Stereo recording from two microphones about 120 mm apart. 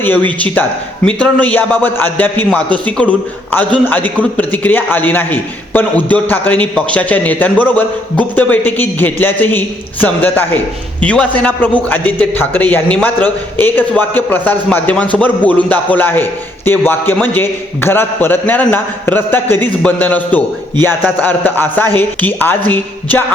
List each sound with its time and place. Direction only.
0.0 s a man's voice: 15° left (ahead or behind)